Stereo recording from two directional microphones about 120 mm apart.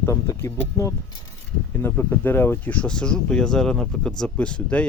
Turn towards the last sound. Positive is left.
turn(degrees=10)  # may be behind; listen again after turning